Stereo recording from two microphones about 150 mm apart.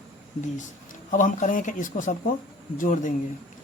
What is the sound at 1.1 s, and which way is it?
A man's voice, 60° left (ahead or behind).